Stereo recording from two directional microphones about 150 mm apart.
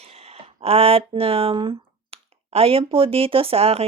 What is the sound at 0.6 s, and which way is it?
Speech, 40° right (ahead or behind).